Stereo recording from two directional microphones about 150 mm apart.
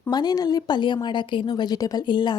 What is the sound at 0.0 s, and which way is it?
Speech, 30° left (ahead or behind).